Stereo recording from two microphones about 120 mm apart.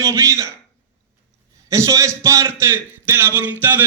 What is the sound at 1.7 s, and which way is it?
A man's voice, 25° right (ahead or behind).